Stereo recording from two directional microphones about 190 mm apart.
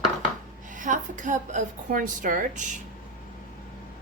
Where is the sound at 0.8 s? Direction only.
40° right (ahead or behind).